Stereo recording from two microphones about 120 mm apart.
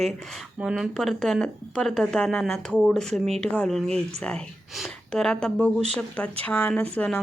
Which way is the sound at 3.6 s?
5° left (ahead or behind).